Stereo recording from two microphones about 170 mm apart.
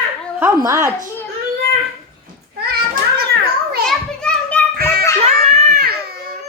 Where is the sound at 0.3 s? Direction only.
15° right (ahead or behind).